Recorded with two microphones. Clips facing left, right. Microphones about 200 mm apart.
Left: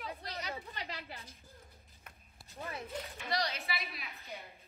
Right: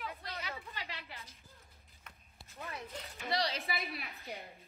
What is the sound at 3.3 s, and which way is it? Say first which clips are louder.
Speech: right 1 dB; 30° right (ahead or behind).